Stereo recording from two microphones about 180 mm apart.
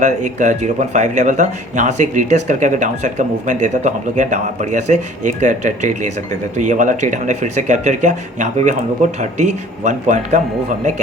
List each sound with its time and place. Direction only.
0.0 s speech: 40° right (ahead or behind)